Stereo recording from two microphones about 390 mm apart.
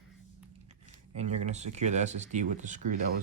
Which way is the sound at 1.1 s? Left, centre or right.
Centre.